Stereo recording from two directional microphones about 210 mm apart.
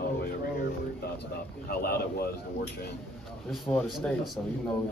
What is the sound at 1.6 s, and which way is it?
Speech, 45° left (ahead or behind).